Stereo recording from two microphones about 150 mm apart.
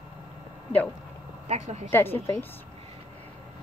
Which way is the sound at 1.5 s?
45° right (ahead or behind).